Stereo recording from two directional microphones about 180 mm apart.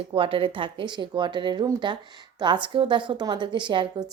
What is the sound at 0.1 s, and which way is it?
A woman's voice, 30° right (ahead or behind).